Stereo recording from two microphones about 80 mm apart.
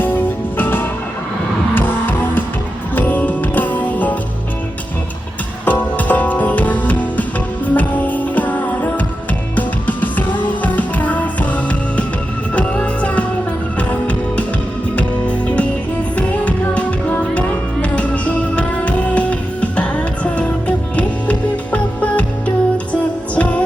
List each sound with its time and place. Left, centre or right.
0.0 s music: left
5.6 s music: centre